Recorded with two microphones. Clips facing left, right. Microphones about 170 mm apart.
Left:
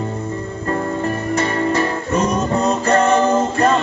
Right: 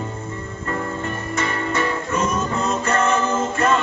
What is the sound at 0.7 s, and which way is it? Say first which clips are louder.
Music: left 6 dB; 35° left (ahead or behind).